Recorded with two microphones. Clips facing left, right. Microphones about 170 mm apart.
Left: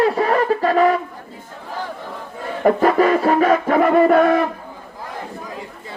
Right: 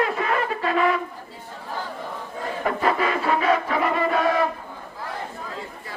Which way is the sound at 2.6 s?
45° left (ahead or behind).